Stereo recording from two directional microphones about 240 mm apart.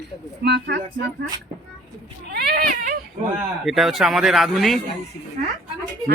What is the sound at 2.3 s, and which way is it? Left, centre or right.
Speech, right.